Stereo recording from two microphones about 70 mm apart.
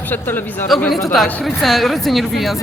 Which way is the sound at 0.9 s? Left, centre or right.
Centre.